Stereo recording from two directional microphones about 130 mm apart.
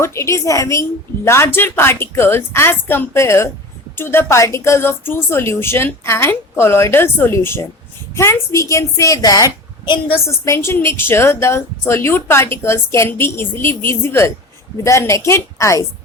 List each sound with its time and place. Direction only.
0.0 s a woman's voice: 20° left (ahead or behind); by 10.2 s 35° left (ahead or behind)
10.2 s a woman's voice: 20° left (ahead or behind)